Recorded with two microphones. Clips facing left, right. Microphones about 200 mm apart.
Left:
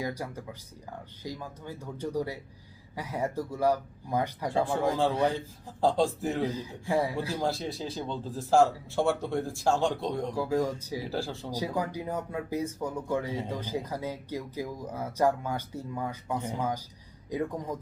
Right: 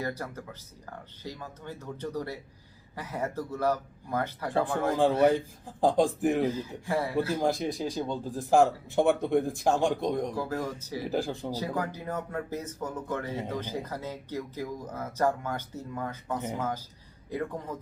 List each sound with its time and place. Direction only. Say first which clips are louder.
0.0 s speech: even; 10° left (ahead or behind)
5.2 s speech: right 5 dB; 15° right (ahead or behind)
6.4 s speech: right 2 dB; 15° left (ahead or behind)
7.4 s speech: right 3 dB; 15° right (ahead or behind)
10.3 s speech: left 4 dB; 15° left (ahead or behind)
11.0 s speech: right 6 dB; 15° right (ahead or behind)
11.5 s speech: left 4 dB; 10° left (ahead or behind)